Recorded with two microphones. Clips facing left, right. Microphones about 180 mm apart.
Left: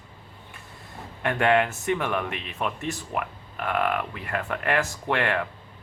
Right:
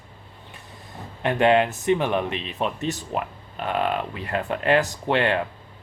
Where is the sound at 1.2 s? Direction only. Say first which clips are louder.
Right 3 dB; 20° right (ahead or behind).